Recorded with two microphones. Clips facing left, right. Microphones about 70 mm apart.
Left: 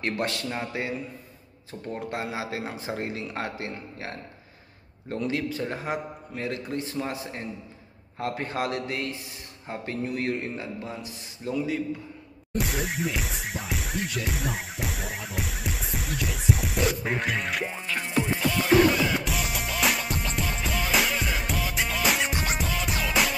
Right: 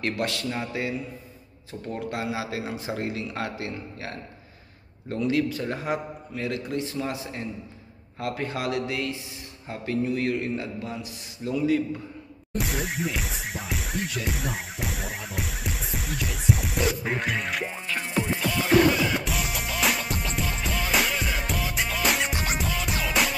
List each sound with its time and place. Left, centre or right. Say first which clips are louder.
0.0 s a man's voice: right 1 dB; left
5.1 s a man's voice: right 4 dB; left
6.3 s a man's voice: right 2 dB; left
12.5 s music: even; centre